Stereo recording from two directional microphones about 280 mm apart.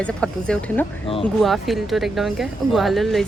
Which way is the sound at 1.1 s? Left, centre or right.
Centre.